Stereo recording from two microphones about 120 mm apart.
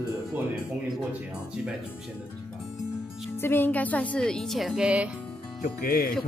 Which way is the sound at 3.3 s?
20° left (ahead or behind).